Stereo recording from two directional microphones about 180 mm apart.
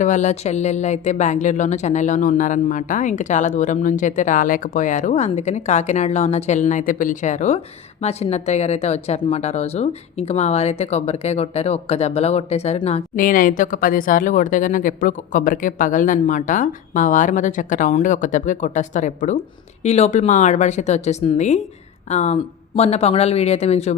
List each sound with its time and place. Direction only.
0.0 s speech: 40° left (ahead or behind)
13.1 s speech: 50° left (ahead or behind)